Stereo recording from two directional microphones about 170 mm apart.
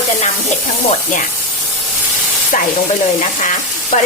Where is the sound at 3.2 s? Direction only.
45° left (ahead or behind).